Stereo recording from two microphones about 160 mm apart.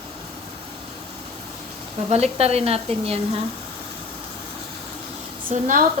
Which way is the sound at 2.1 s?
40° right (ahead or behind).